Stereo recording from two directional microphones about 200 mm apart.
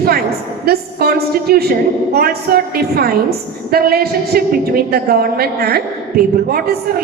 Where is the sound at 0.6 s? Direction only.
50° right (ahead or behind).